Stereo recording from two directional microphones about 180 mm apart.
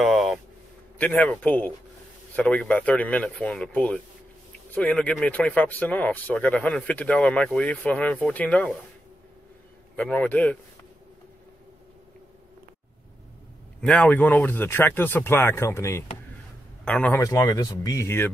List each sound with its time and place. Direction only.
0.0 s a sound: centre (ahead or behind)
0.9 s speech: 10° left (ahead or behind)
9.9 s speech: 10° left (ahead or behind)
13.7 s speech: 5° left (ahead or behind)
17.2 s speech: 20° left (ahead or behind)